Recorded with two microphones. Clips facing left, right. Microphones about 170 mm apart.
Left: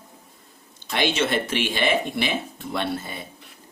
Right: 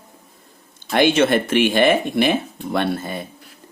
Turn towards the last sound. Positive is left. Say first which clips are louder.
# right 6 dB
turn(degrees=-55)  # may be behind; listen again after turning